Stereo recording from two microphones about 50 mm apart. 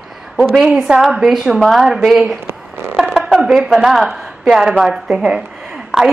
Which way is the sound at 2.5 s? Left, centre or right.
Right.